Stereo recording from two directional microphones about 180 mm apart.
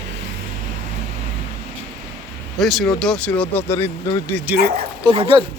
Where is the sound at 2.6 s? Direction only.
Centre (ahead or behind); by 4.3 s 15° left (ahead or behind).